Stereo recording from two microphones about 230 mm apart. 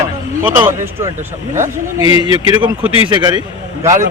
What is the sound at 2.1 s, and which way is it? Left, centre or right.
Speech, left.